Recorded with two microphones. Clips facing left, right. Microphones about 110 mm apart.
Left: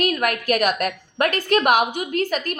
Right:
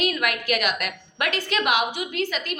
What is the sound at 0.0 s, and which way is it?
A woman's voice, 45° left (ahead or behind).